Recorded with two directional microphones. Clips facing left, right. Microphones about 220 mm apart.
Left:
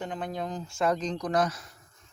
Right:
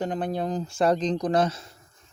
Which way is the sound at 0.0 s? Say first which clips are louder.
Right 6 dB; 35° right (ahead or behind).